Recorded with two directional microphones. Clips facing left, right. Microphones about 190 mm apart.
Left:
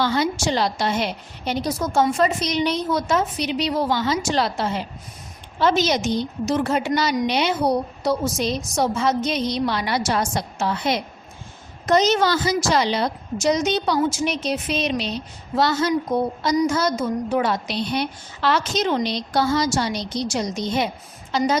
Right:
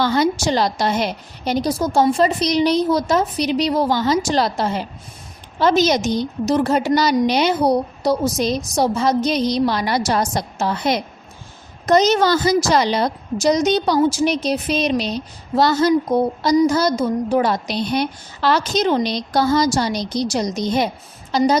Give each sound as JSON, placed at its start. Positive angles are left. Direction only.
{"t": 0.0, "sound": "a woman's voice", "side_deg": -40}